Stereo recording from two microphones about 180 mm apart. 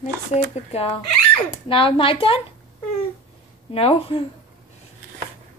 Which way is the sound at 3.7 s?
30° left (ahead or behind).